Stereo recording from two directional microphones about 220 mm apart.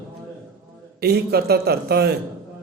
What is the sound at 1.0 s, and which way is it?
Speech, 45° right (ahead or behind).